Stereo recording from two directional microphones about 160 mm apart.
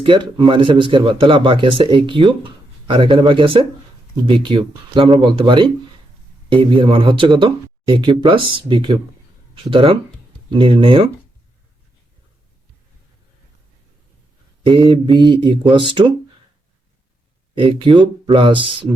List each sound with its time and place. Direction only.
0.0 s speech: 30° right (ahead or behind)
14.6 s speech: 30° right (ahead or behind)
17.6 s speech: 30° right (ahead or behind)